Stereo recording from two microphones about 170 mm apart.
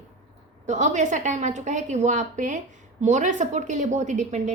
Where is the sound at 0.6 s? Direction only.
45° right (ahead or behind).